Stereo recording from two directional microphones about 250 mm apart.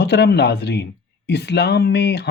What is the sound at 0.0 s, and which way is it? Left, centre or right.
Speech, left.